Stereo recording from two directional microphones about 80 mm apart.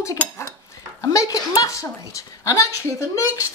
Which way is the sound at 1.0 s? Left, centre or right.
Left.